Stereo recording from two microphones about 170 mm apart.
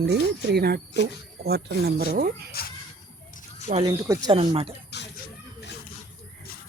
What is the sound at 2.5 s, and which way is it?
Speech, 65° left (ahead or behind).